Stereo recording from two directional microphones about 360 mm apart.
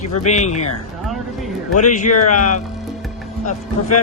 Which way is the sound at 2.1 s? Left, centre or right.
Left.